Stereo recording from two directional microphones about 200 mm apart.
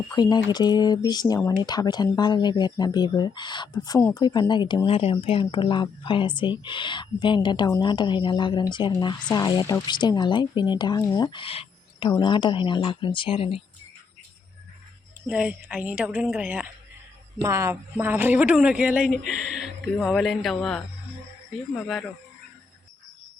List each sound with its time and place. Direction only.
0.1 s speech: 20° left (ahead or behind)
15.3 s a woman's voice: 5° right (ahead or behind)